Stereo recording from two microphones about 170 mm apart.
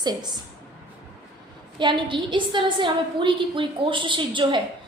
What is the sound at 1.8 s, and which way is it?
A woman's voice, 30° right (ahead or behind).